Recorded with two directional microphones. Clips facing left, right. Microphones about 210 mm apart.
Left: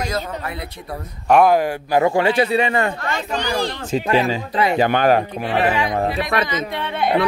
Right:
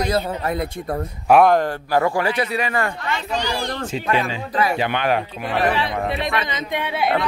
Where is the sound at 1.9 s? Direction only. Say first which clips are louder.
Left 4 dB; 20° left (ahead or behind).